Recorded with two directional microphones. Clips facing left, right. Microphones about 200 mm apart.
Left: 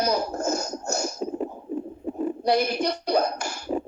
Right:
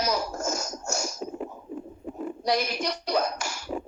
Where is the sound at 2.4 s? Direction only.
55° left (ahead or behind).